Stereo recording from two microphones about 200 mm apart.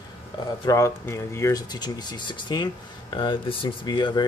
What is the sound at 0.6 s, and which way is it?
Speech, 15° left (ahead or behind).